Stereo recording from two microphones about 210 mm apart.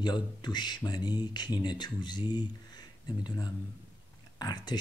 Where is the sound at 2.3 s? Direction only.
20° left (ahead or behind).